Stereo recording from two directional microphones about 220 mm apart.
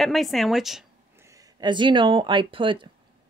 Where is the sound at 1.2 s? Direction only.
15° right (ahead or behind).